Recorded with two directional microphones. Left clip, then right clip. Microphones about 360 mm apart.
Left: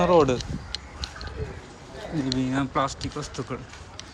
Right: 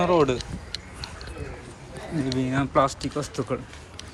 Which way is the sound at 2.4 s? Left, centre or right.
Centre.